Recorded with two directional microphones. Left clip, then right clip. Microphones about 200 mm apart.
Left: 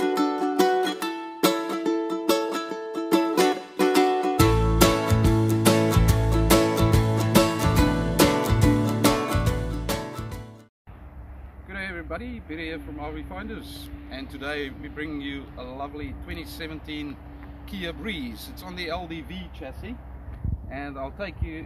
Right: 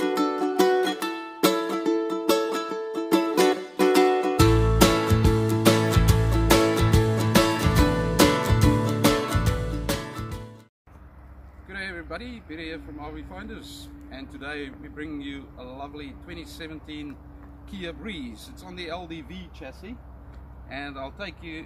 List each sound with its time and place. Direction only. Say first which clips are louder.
0.0 s music: left 1 dB; centre (ahead or behind)
11.7 s speech: left 1 dB; 5° left (ahead or behind)